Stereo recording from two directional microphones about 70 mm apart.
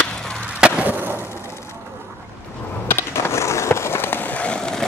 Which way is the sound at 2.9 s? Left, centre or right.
Left.